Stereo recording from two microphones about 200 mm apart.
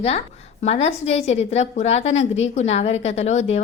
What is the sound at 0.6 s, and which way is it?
A woman's voice, 35° left (ahead or behind).